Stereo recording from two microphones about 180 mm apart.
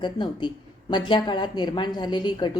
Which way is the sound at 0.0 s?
25° left (ahead or behind).